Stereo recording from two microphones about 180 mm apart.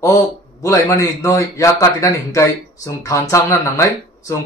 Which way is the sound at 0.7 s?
15° left (ahead or behind).